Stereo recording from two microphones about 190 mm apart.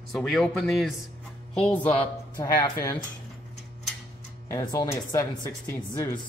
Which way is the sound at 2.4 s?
20° left (ahead or behind).